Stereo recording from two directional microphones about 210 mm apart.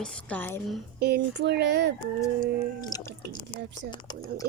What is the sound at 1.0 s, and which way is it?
Speech, 50° right (ahead or behind).